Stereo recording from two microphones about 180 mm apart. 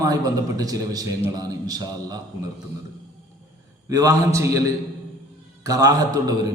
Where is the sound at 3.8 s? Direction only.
20° right (ahead or behind).